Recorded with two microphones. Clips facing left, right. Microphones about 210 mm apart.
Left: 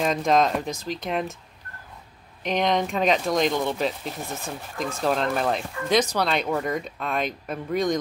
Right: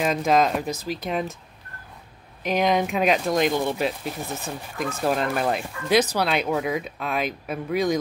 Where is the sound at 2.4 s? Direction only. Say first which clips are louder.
Right 2 dB; 5° right (ahead or behind).